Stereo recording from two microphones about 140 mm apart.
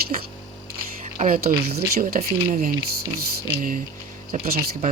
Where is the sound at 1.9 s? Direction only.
90° right.